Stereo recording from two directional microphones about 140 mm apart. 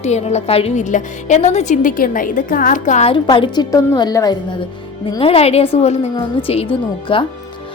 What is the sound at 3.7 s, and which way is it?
Speech, 30° left (ahead or behind).